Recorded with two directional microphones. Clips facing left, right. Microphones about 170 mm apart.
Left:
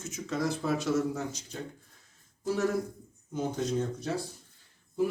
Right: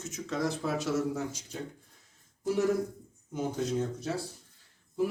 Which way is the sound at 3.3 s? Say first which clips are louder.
Left 1 dB; 10° right (ahead or behind).